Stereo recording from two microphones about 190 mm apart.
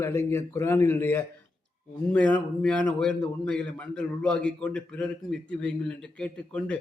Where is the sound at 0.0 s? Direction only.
15° left (ahead or behind).